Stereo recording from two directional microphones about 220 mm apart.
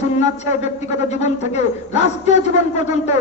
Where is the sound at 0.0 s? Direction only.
30° left (ahead or behind).